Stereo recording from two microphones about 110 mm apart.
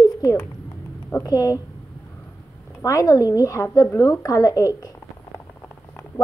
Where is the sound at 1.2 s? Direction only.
35° left (ahead or behind).